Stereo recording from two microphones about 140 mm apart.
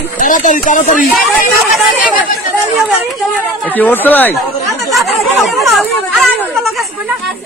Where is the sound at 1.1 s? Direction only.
Centre (ahead or behind).